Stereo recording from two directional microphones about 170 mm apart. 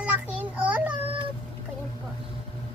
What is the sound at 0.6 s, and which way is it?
Child singing, 10° right (ahead or behind).